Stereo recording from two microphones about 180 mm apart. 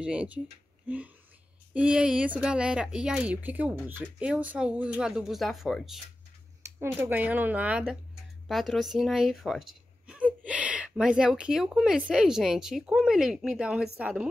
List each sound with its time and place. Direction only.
0.0 s a woman's voice: 5° right (ahead or behind)
6.8 s a woman's voice: 10° right (ahead or behind)